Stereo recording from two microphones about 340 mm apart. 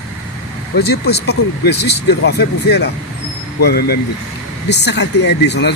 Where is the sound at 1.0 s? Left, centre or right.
Left.